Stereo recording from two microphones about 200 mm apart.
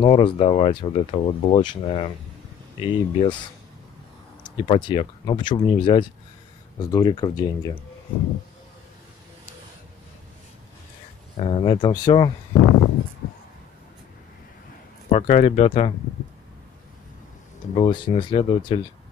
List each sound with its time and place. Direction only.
0.0 s speech: 25° left (ahead or behind)
4.4 s speech: 30° left (ahead or behind)
11.3 s speech: 25° left (ahead or behind)
15.0 s speech: 35° left (ahead or behind)
17.7 s speech: 25° left (ahead or behind)